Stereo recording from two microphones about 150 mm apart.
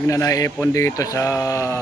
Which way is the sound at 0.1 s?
25° left (ahead or behind).